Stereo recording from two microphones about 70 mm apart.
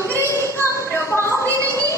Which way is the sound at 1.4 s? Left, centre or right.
Right.